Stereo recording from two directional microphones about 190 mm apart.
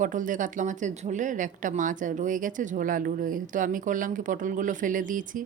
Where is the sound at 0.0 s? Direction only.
45° right (ahead or behind).